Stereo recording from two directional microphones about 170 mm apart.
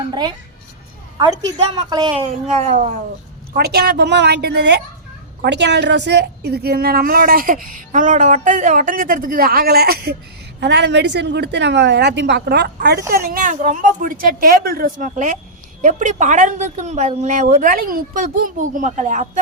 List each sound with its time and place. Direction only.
0.0 s a woman's voice: 25° right (ahead or behind)
2.1 s a woman's voice: 45° right (ahead or behind)
3.5 s a woman's voice: 70° right (ahead or behind)
5.4 s a woman's voice: 90° right; by 10.2 s 70° right (ahead or behind)
10.6 s a woman's voice: 90° right
13.1 s a woman's voice: 60° right (ahead or behind)